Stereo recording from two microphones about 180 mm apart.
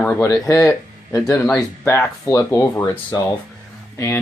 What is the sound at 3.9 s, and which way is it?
Speech, 15° left (ahead or behind).